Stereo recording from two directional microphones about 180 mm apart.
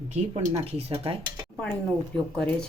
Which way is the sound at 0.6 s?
35° right (ahead or behind).